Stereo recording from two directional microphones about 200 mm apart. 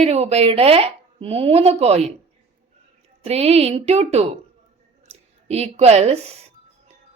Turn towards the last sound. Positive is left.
turn(degrees=-30)  # may be behind; listen again after turning